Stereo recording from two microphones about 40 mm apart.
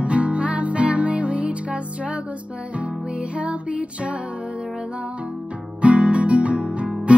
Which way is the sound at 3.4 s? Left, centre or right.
Right.